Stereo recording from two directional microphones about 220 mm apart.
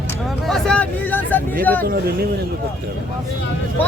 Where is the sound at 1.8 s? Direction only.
45° right (ahead or behind).